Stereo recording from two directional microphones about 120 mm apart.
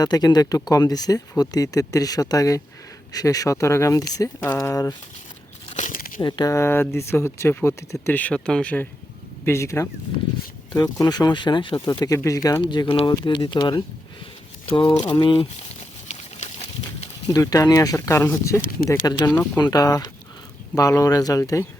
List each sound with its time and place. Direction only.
0.0 s speech: 35° left (ahead or behind)
6.2 s speech: 40° left (ahead or behind)
6.5 s speech: 20° left (ahead or behind)
9.5 s speech: 25° left (ahead or behind)
12.6 s speech: 40° left (ahead or behind)
16.0 s a sound: 65° left (ahead or behind)
17.2 s speech: 30° left (ahead or behind)